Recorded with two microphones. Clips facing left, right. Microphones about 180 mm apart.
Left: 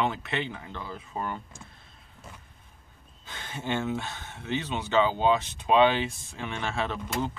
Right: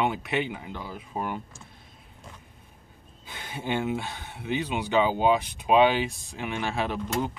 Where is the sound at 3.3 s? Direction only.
10° right (ahead or behind).